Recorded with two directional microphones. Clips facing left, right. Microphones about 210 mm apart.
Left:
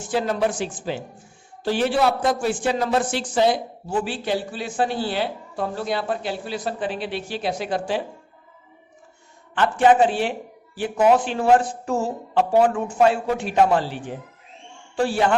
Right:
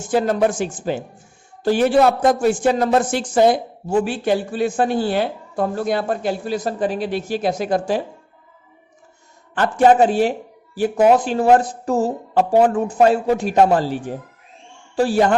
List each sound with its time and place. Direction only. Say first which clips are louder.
0.0 s speech: right 5 dB; 45° right (ahead or behind)
9.6 s speech: right 3 dB; 40° right (ahead or behind)